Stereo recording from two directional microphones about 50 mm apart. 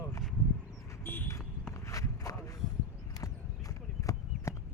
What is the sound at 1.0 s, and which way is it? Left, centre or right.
Speech, left.